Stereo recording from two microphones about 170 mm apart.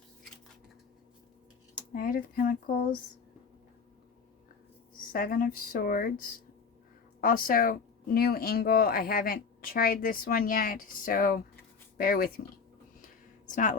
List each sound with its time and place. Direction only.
1.9 s speech: 55° left (ahead or behind)
5.1 s speech: 55° left (ahead or behind)
13.5 s speech: 50° left (ahead or behind)